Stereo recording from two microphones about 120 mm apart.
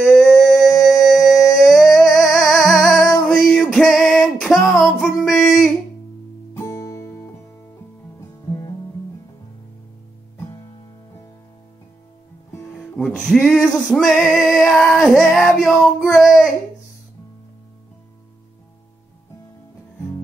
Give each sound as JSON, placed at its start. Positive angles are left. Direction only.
{"t": 0.2, "sound": "humming", "side_deg": 0}
{"t": 2.4, "sound": "music", "side_deg": 25}
{"t": 2.8, "sound": "female singing", "side_deg": 0}
{"t": 5.3, "sound": "a sound", "side_deg": 90}
{"t": 6.5, "sound": "music", "side_deg": 25}
{"t": 12.7, "sound": "music", "side_deg": 5}